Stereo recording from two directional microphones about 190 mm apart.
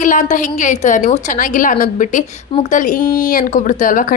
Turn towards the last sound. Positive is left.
turn(degrees=45)  # may be behind; listen again after turning